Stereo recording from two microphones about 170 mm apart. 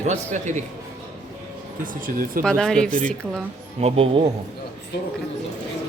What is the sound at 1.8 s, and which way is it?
Speech, 55° right (ahead or behind).